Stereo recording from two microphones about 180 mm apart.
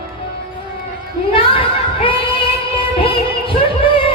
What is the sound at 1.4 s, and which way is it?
Singing, 30° left (ahead or behind).